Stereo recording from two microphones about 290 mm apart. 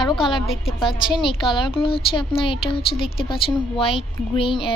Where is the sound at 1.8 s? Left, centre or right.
Centre.